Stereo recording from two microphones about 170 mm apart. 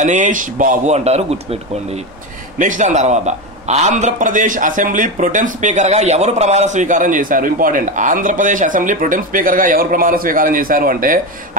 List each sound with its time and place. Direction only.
0.0 s a man's voice: 45° right (ahead or behind)
2.6 s a man's voice: 45° right (ahead or behind)